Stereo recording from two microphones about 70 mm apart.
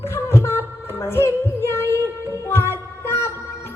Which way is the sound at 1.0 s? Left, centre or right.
Left.